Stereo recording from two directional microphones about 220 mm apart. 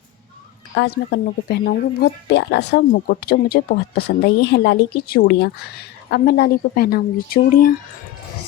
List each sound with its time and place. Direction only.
0.8 s speech: 50° left (ahead or behind)